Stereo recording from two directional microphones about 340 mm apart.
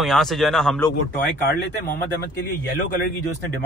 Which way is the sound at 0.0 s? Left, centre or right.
Centre.